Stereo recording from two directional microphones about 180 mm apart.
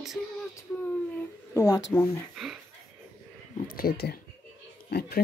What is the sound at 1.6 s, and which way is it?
Speech, 20° left (ahead or behind).